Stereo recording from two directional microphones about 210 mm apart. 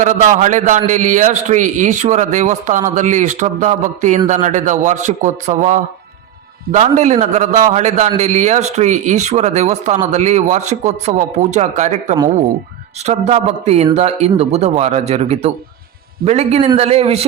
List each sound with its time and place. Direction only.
0.0 s a man's voice: 35° right (ahead or behind)